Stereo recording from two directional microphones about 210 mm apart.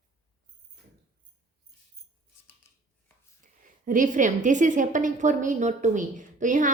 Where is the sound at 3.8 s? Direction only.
40° right (ahead or behind).